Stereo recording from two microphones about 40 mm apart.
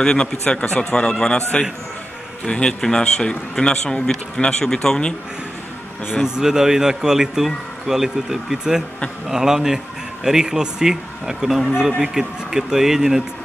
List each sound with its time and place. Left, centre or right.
0.0 s a man's voice: centre
2.4 s speech: centre
6.2 s a man's voice: centre